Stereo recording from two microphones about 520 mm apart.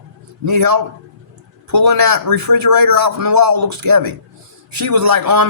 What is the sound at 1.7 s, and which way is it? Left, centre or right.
A man's voice, right.